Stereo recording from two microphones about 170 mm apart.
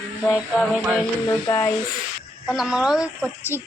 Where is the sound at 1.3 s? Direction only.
20° left (ahead or behind).